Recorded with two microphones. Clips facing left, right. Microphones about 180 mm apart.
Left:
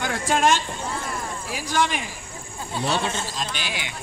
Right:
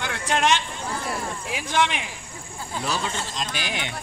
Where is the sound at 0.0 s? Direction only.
45° left (ahead or behind).